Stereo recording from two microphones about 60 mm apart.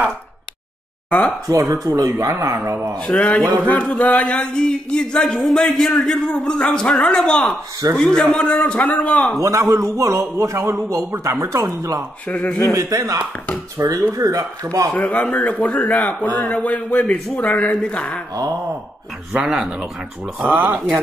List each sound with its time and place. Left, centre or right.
1.5 s a man's voice: right
3.0 s a sound: centre
8.4 s a man's voice: centre
9.4 s a man's voice: right
15.0 s a man's voice: left
19.3 s speech: centre
20.4 s speech: right